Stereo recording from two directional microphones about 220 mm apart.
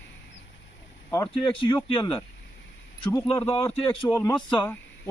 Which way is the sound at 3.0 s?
10° left (ahead or behind).